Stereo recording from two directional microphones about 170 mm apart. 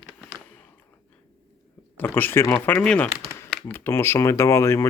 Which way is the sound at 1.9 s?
10° left (ahead or behind).